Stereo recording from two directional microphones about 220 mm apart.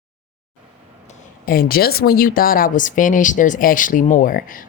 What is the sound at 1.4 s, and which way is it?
Speech, 40° left (ahead or behind).